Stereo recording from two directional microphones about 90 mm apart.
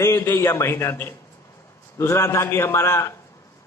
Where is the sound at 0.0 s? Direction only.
30° left (ahead or behind).